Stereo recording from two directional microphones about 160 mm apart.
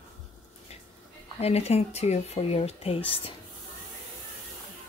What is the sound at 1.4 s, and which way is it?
Speech, 40° left (ahead or behind).